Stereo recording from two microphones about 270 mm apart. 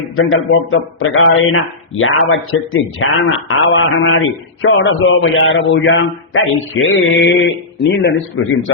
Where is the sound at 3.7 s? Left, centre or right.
Left.